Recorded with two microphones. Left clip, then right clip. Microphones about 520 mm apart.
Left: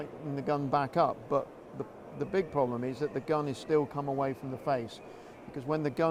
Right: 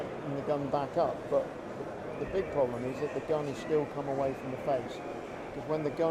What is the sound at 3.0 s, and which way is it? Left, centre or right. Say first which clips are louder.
Speech: left 1 dB; left.